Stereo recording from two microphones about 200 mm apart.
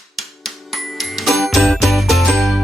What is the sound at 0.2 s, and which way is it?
Music, centre (ahead or behind).